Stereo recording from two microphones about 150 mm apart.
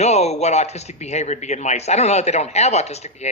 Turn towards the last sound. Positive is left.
turn(degrees=45)  # may be behind; listen again after turning